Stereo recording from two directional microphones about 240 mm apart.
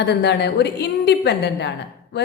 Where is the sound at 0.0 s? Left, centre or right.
Left.